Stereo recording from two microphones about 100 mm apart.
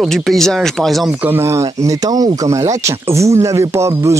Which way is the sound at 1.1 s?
20° right (ahead or behind).